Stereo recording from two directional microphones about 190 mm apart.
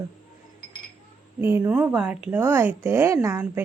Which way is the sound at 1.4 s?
10° right (ahead or behind).